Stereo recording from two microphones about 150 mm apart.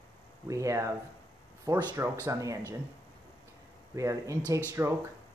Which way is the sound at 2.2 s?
20° right (ahead or behind).